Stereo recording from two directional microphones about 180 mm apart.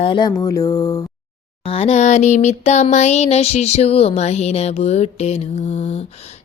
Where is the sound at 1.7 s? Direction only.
35° left (ahead or behind).